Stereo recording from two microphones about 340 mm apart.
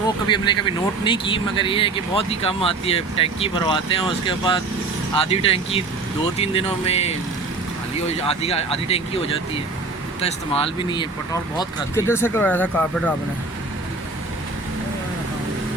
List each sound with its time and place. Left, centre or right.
0.3 s speech: centre